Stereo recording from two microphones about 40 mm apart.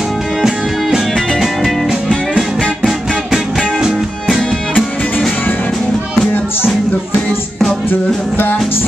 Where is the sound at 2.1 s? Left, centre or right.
Left.